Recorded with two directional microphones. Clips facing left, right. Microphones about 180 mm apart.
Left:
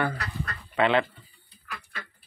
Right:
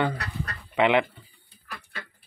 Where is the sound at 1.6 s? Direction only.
35° right (ahead or behind).